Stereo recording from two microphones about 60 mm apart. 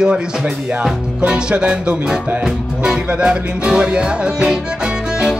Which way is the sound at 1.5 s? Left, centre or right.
Centre.